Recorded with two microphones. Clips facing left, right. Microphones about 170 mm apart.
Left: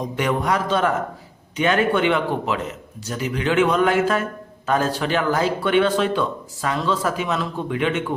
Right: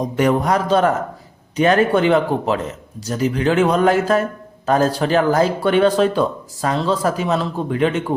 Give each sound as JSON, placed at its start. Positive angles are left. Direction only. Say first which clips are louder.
{"t": 0.0, "sound": "a man's voice", "louder": "right 5 dB", "side_deg": -40}